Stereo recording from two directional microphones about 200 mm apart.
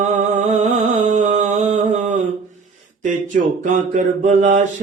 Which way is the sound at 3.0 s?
40° right (ahead or behind).